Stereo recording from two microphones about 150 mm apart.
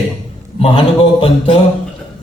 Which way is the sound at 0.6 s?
40° left (ahead or behind).